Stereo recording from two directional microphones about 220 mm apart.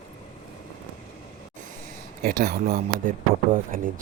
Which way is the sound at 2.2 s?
40° right (ahead or behind).